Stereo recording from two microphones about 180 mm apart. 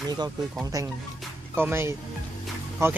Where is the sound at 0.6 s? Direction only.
20° right (ahead or behind).